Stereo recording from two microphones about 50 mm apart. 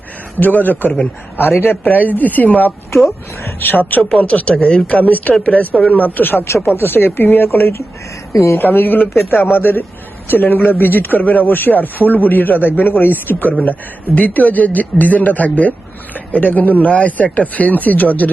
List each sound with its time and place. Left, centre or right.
0.3 s speech: left
1.8 s speech: left
4.2 s speech: left
6.0 s speech: left
6.4 s speech: left
6.7 s speech: left
8.5 s speech: left